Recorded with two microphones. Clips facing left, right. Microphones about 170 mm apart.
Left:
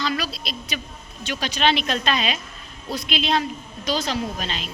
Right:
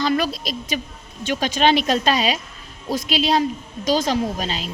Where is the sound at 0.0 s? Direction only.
45° right (ahead or behind).